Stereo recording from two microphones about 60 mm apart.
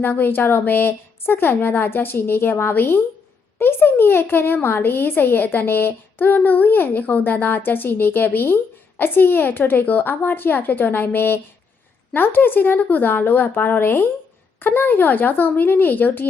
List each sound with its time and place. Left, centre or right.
0.0 s speech: left